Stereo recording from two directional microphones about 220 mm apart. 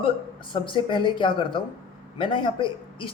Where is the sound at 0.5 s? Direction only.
20° left (ahead or behind).